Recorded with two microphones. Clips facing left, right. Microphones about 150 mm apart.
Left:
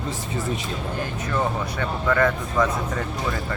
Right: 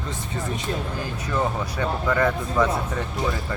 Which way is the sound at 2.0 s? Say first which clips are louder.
Left 2 dB; 10° right (ahead or behind).